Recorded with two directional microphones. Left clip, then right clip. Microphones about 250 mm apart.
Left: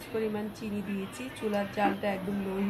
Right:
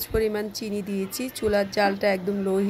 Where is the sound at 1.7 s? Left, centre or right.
Right.